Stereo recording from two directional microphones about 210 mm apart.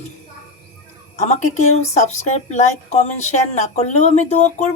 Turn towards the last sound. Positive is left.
turn(degrees=35)  # may be behind; listen again after turning